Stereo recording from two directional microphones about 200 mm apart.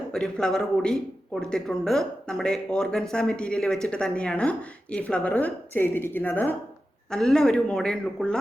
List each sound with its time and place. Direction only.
0.1 s speech: 5° left (ahead or behind)